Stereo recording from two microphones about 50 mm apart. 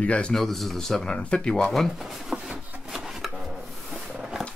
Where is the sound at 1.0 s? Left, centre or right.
Centre.